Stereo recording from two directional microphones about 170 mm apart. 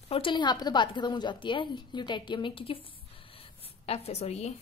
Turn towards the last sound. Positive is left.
turn(degrees=40)  # may be behind; listen again after turning